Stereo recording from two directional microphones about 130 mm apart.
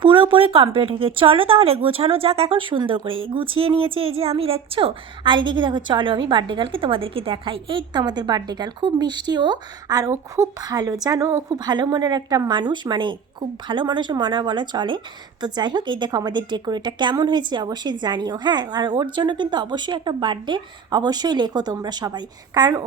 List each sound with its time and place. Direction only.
0.0 s speech: 40° right (ahead or behind); by 11.6 s 20° right (ahead or behind)
11.6 s speech: 35° right (ahead or behind)